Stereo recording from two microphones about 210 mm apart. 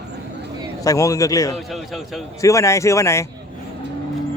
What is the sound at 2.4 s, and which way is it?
Speech, 15° left (ahead or behind).